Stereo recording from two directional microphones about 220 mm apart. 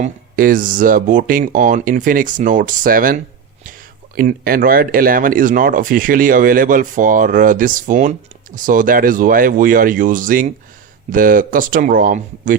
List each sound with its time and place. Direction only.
0.0 s speech: 40° right (ahead or behind)